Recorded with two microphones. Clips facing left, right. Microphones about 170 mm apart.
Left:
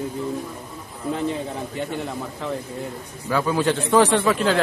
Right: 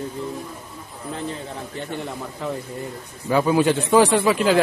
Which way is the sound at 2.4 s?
Centre (ahead or behind).